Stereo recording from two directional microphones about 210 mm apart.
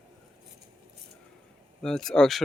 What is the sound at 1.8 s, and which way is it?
Speech, centre (ahead or behind).